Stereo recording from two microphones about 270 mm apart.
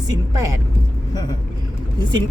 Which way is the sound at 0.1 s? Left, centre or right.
Centre.